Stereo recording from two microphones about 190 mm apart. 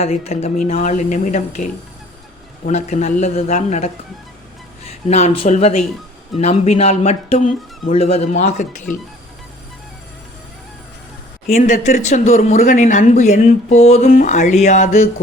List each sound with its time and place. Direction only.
0.0 s speech: 35° left (ahead or behind)
2.6 s speech: 40° left (ahead or behind)
11.5 s speech: 40° left (ahead or behind)